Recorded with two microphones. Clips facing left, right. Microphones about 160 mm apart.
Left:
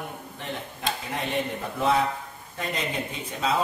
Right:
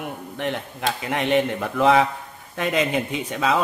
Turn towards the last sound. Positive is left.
turn(degrees=-85)